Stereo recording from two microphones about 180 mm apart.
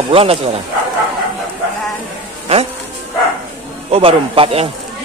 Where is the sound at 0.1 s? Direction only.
35° right (ahead or behind).